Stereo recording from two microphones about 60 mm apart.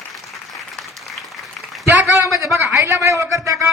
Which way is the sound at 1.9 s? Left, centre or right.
Right.